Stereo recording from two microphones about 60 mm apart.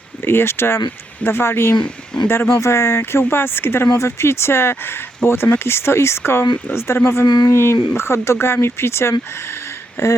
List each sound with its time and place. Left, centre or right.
0.2 s speech: left